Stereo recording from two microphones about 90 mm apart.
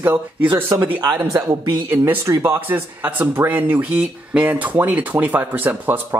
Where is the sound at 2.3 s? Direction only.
25° right (ahead or behind).